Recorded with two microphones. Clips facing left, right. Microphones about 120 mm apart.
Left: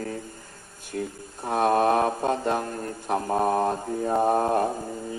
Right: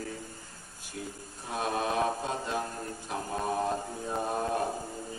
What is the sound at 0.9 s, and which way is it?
Speech, 55° left (ahead or behind).